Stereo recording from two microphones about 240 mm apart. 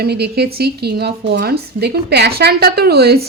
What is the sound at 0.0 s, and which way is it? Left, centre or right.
A woman's voice, right.